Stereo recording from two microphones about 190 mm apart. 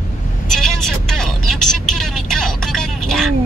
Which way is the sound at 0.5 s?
Centre (ahead or behind).